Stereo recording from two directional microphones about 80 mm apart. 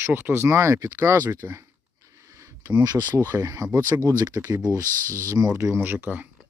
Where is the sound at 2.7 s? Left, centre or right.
Right.